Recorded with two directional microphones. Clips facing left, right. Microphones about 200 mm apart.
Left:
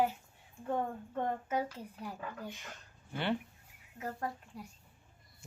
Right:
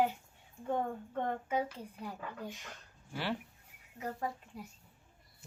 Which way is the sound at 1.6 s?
10° left (ahead or behind).